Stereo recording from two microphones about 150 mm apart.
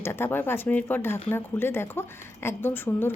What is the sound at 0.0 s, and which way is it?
A woman's voice, 15° left (ahead or behind).